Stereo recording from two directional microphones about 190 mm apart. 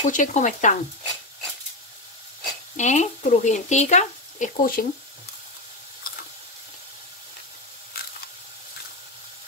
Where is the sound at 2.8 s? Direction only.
40° left (ahead or behind).